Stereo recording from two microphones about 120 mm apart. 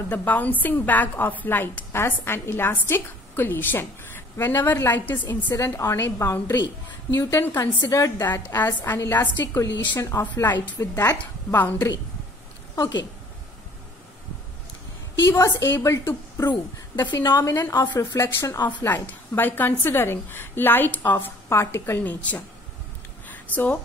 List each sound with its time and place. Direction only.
0.1 s a woman's voice: 15° left (ahead or behind)
6.4 s a woman's voice: 35° left (ahead or behind)
7.2 s a woman's voice: 20° left (ahead or behind)
12.7 s a woman's voice: 30° left (ahead or behind)
15.2 s a woman's voice: 25° left (ahead or behind)
17.1 s a woman's voice: 40° left (ahead or behind)
17.4 s a woman's voice: 20° left (ahead or behind)
23.2 s a sound: 15° left (ahead or behind)